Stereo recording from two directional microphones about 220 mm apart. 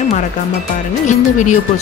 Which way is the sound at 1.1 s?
35° left (ahead or behind).